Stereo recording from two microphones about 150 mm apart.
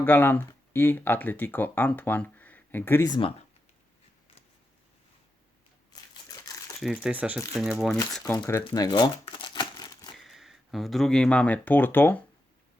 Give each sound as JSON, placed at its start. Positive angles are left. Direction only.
{"t": 0.0, "sound": "speech", "side_deg": 15}
{"t": 3.1, "sound": "speech", "side_deg": 35}
{"t": 6.2, "sound": "crumpling", "side_deg": 25}
{"t": 6.7, "sound": "speech", "side_deg": -5}
{"t": 8.7, "sound": "crumpling", "side_deg": 25}
{"t": 10.2, "sound": "speech", "side_deg": 0}